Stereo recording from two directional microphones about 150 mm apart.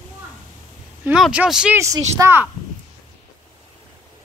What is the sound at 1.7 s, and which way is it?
Speech, 20° right (ahead or behind).